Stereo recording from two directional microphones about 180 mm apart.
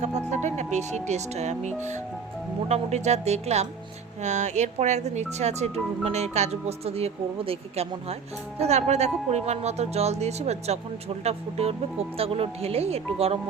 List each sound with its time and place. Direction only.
0.3 s speech: 40° right (ahead or behind)